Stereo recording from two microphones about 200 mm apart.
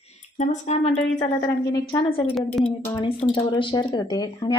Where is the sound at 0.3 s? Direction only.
35° left (ahead or behind).